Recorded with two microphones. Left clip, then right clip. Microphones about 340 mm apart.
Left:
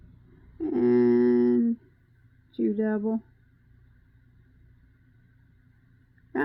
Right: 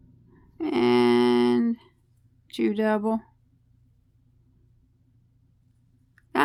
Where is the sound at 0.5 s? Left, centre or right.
Right.